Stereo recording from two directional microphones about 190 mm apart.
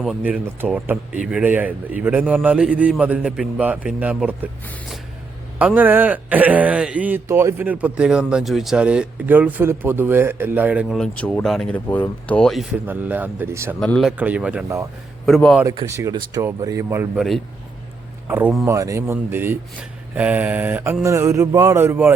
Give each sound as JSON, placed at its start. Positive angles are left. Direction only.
{"t": 0.0, "sound": "a man's voice", "side_deg": -5}
{"t": 5.5, "sound": "a man's voice", "side_deg": -10}
{"t": 12.9, "sound": "a man's voice", "side_deg": -10}
{"t": 13.7, "sound": "speech", "side_deg": 5}
{"t": 14.2, "sound": "a man's voice", "side_deg": -5}
{"t": 15.3, "sound": "speech", "side_deg": 0}
{"t": 15.6, "sound": "a man's voice", "side_deg": -25}
{"t": 17.2, "sound": "speech", "side_deg": 0}
{"t": 18.3, "sound": "a man's voice", "side_deg": -10}